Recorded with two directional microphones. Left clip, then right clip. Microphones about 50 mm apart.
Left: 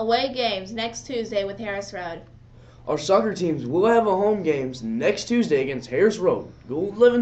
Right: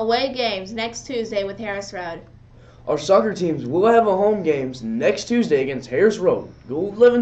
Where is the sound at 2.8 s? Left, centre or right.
Centre.